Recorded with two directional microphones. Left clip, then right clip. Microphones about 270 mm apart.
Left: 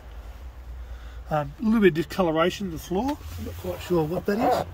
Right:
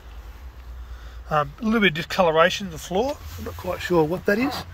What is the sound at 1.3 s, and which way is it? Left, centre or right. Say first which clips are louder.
Speech: right 4 dB; centre.